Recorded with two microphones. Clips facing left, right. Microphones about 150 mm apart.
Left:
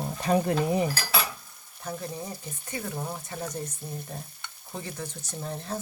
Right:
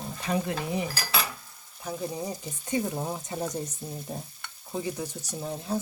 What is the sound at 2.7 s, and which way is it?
Speech, 20° right (ahead or behind).